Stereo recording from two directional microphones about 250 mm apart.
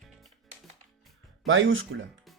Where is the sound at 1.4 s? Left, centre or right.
Right.